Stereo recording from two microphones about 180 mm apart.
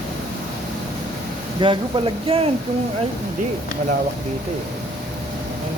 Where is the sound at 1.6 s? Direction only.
25° right (ahead or behind).